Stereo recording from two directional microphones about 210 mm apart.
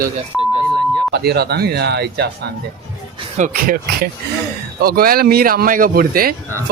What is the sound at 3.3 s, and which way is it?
Speech, 40° right (ahead or behind).